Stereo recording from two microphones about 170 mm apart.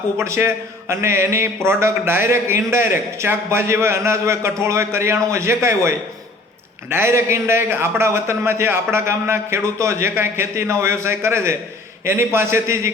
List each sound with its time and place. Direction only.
0.2 s a man's voice: 15° right (ahead or behind)